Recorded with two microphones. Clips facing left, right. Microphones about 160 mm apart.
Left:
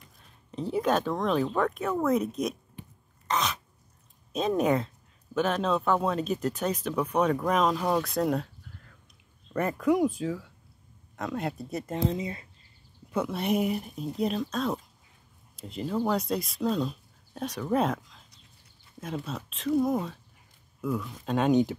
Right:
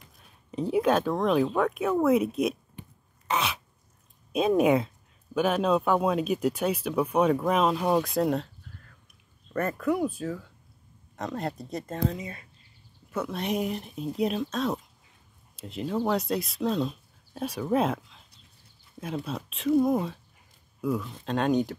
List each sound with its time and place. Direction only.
0.5 s speech: 10° right (ahead or behind)
3.3 s a sound: 5° right (ahead or behind)
4.3 s speech: 10° right (ahead or behind)
9.5 s speech: 15° left (ahead or behind)
11.9 s speech: 25° left (ahead or behind)
13.1 s speech: 10° left (ahead or behind)
19.2 s speech: 5° right (ahead or behind)